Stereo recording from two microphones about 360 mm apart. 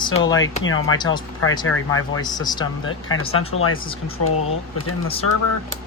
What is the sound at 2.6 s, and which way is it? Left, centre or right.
Speech, left.